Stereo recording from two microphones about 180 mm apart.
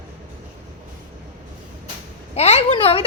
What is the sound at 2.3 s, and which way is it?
Speech, 35° left (ahead or behind).